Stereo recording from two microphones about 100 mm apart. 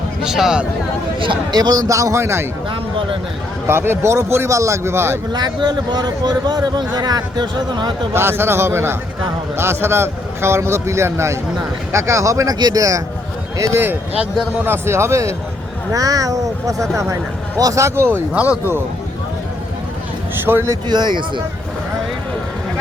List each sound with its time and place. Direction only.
0.2 s speech: 5° right (ahead or behind)
1.2 s a man's voice: 50° right (ahead or behind); by 2.5 s 25° right (ahead or behind)
3.7 s speech: 25° right (ahead or behind)
5.3 s a man's voice: 45° right (ahead or behind)
8.1 s a man's voice: 25° right (ahead or behind)
13.6 s a man's voice: 20° right (ahead or behind)
18.3 s speech: 15° right (ahead or behind)
20.4 s speech: 25° right (ahead or behind)
20.8 s a man's voice: 45° right (ahead or behind)